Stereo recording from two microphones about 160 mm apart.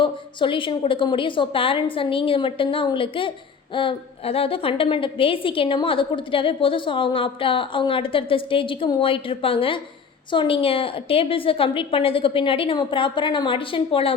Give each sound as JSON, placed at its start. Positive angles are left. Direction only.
{"t": 0.0, "sound": "a woman's voice", "side_deg": 30}